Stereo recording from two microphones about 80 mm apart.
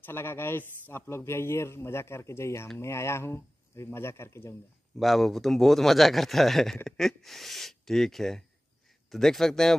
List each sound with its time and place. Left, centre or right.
0.0 s a man's voice: left
4.9 s a man's voice: centre